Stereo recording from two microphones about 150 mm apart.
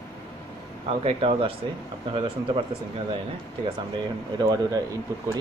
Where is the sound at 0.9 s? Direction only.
40° right (ahead or behind).